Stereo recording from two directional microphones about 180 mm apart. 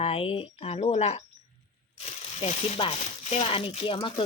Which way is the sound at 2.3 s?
35° left (ahead or behind).